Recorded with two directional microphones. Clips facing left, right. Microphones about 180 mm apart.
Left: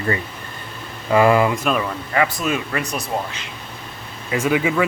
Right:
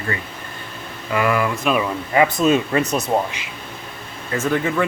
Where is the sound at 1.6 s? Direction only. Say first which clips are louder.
Right 1 dB; 5° right (ahead or behind).